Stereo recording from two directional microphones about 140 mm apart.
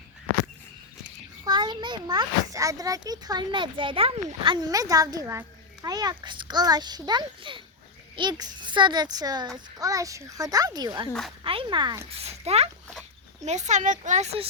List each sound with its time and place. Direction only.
1.5 s a child's voice: 30° right (ahead or behind)
12.1 s a woman's voice: 50° right (ahead or behind)